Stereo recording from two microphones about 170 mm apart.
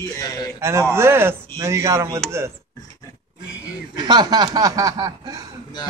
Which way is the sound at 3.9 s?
25° right (ahead or behind).